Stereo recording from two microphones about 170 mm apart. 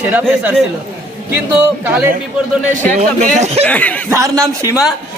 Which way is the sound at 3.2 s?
40° right (ahead or behind).